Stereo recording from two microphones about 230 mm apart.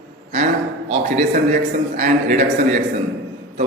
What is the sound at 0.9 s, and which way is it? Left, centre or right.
A man's voice, right.